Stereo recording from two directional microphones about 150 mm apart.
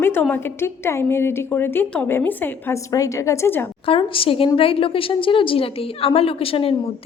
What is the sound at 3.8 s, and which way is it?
A woman's voice, 35° left (ahead or behind).